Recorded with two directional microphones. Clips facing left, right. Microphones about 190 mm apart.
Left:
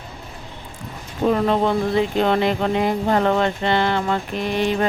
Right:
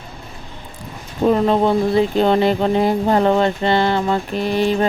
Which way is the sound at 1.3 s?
35° right (ahead or behind).